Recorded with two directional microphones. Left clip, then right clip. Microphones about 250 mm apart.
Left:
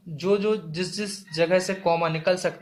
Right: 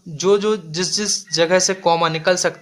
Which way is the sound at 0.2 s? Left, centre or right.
Right.